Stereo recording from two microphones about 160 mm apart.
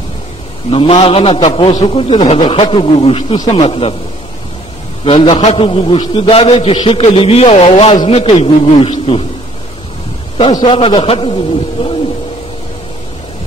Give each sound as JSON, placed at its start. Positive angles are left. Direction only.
{"t": 0.7, "sound": "a man's voice", "side_deg": 35}
{"t": 5.0, "sound": "a man's voice", "side_deg": 30}
{"t": 10.3, "sound": "a man's voice", "side_deg": 30}